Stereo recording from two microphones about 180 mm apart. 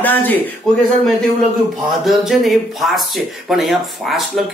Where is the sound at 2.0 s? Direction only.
Centre (ahead or behind).